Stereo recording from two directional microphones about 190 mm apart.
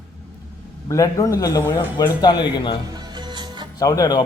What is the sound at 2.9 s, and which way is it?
Music, 20° right (ahead or behind).